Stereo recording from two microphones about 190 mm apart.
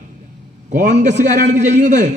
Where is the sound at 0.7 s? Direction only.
40° right (ahead or behind).